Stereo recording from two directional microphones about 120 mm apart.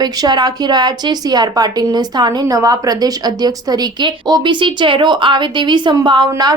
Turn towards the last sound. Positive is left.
turn(degrees=-35)  # may be behind; listen again after turning